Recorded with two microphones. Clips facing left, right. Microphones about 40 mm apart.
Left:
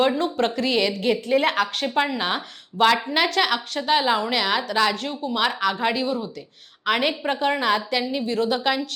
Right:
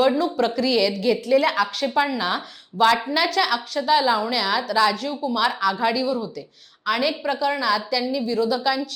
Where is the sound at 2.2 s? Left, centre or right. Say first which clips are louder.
Right 1 dB; left.